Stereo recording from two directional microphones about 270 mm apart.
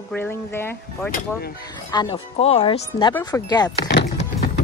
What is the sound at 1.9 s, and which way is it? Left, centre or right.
Speech, centre.